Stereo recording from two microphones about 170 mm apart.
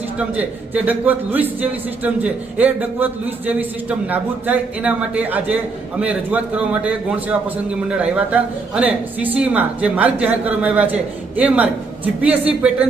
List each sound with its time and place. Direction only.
0.2 s a man's voice: 10° right (ahead or behind)